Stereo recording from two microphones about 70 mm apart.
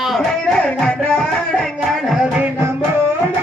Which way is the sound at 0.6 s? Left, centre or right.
Centre.